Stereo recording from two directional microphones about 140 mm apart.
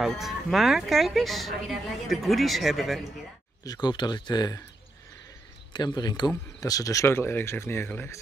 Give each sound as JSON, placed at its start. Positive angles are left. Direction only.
{"t": 0.0, "sound": "speech", "side_deg": 0}
{"t": 3.6, "sound": "speech", "side_deg": 30}
{"t": 5.7, "sound": "speech", "side_deg": 30}